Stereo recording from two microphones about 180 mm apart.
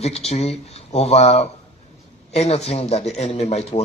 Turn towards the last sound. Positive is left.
turn(degrees=35)  # may be behind; listen again after turning